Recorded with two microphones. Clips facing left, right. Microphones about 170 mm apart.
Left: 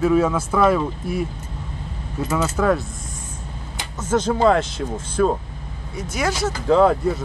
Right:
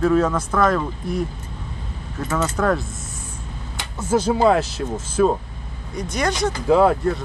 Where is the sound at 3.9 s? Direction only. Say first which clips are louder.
Right 1 dB; 10° right (ahead or behind).